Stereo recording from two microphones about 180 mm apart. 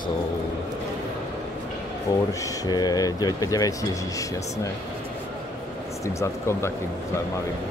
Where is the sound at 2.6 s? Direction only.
20° left (ahead or behind).